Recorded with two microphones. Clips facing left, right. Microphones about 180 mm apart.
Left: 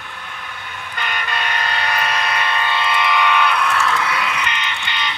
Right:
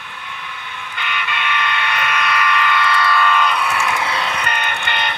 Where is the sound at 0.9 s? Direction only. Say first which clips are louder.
Left 1 dB; 40° left (ahead or behind); by 3.6 s 10° left (ahead or behind).